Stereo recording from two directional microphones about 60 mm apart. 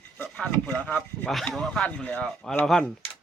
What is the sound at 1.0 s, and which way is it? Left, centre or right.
Speech, centre.